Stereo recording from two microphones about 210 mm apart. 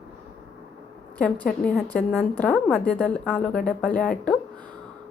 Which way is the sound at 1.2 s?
5° left (ahead or behind).